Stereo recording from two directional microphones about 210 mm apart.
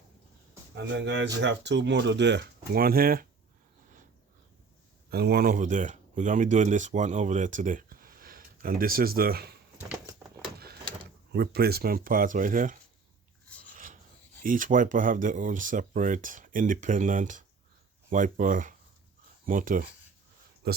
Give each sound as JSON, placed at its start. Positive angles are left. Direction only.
{"t": 0.8, "sound": "speech", "side_deg": -55}
{"t": 5.1, "sound": "speech", "side_deg": -50}
{"t": 10.6, "sound": "speech", "side_deg": -50}
{"t": 13.7, "sound": "filing", "side_deg": -40}
{"t": 14.4, "sound": "speech", "side_deg": -40}
{"t": 20.6, "sound": "a sound", "side_deg": -45}